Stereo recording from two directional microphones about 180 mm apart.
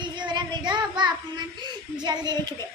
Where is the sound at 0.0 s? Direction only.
25° right (ahead or behind).